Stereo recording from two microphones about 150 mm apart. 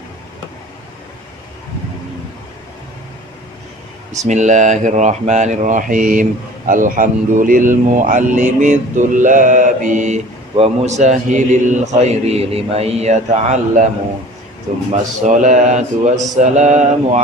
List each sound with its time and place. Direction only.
4.2 s a man's voice: 50° right (ahead or behind)